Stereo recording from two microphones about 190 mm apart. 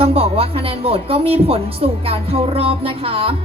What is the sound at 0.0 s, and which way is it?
A woman's voice, 30° right (ahead or behind).